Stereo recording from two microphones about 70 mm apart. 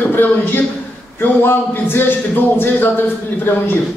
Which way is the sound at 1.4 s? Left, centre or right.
Left.